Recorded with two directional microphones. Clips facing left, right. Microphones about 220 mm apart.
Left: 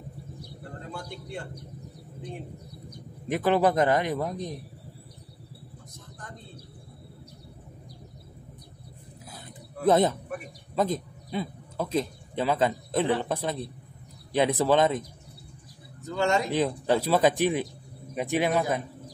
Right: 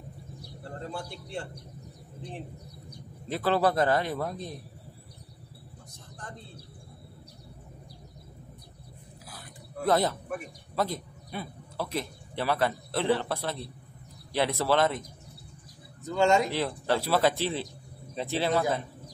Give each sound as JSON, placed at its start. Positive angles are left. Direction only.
{"t": 1.3, "sound": "speech", "side_deg": -30}
{"t": 3.3, "sound": "speech", "side_deg": 15}
{"t": 9.8, "sound": "speech", "side_deg": 20}
{"t": 16.2, "sound": "a man's voice", "side_deg": -25}
{"t": 16.4, "sound": "speech", "side_deg": 15}